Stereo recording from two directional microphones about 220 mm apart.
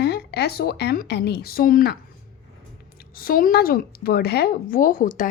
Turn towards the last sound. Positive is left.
turn(degrees=40)  # may be behind; listen again after turning